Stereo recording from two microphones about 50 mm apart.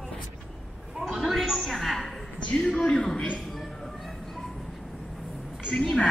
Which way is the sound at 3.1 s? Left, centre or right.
Left.